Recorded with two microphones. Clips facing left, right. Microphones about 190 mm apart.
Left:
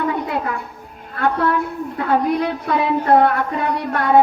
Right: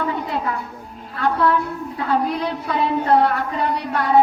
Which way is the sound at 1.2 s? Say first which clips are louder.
Even; 55° left (ahead or behind).